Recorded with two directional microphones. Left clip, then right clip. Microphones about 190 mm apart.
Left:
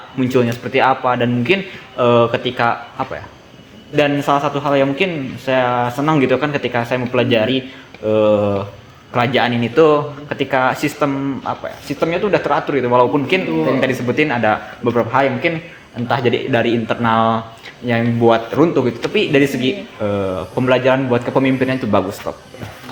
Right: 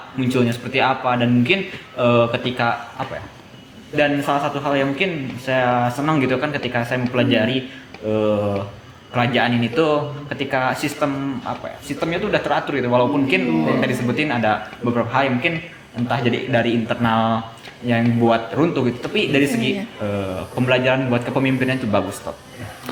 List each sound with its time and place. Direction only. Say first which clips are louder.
0.2 s a man's voice: left 4 dB; 35° left (ahead or behind)
3.9 s a man's voice: left 3 dB; 35° left (ahead or behind)